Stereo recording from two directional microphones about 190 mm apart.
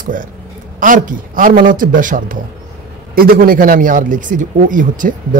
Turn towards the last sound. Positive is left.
turn(degrees=-45)  # may be behind; listen again after turning